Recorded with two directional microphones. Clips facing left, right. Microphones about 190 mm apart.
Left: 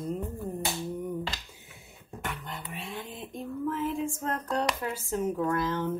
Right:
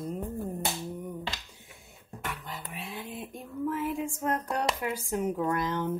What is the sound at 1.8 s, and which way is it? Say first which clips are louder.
Speech: left 2 dB; centre (ahead or behind).